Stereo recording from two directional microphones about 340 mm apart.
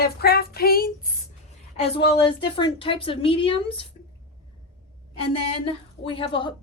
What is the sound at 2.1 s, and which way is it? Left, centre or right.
Speech, centre.